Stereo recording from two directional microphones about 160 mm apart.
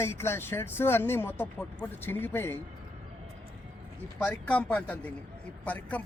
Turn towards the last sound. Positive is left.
turn(degrees=10)  # may be behind; listen again after turning